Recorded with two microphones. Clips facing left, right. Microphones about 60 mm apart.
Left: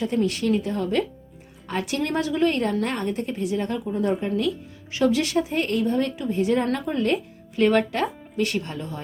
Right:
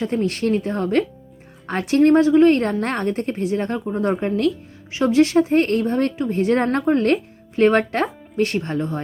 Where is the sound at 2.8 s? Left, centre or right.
Right.